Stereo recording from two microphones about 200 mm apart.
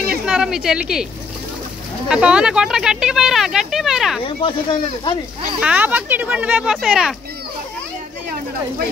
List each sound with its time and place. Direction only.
0.3 s speech: 5° right (ahead or behind)
2.0 s speech: 5° right (ahead or behind)
4.4 s speech: 25° left (ahead or behind)
5.6 s speech: 5° right (ahead or behind)